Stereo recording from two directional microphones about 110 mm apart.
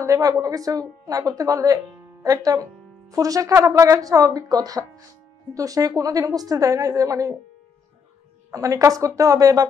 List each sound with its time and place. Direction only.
0.0 s a woman's voice: 30° right (ahead or behind)
8.5 s a woman's voice: 30° right (ahead or behind)